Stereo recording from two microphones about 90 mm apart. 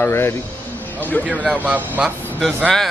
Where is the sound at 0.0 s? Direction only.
30° left (ahead or behind).